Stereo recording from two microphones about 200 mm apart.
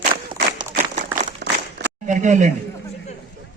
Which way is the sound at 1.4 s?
55° right (ahead or behind).